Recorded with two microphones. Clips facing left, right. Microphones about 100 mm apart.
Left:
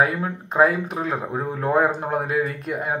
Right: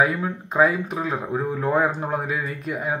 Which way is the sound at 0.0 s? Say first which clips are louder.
Even; 45° left (ahead or behind).